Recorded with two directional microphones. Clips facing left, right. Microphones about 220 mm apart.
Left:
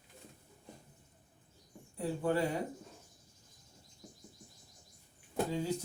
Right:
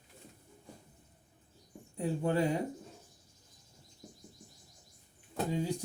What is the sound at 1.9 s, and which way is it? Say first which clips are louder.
Speech: right 1 dB; 20° right (ahead or behind).